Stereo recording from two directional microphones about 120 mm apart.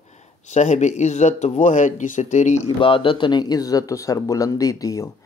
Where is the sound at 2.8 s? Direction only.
45° left (ahead or behind).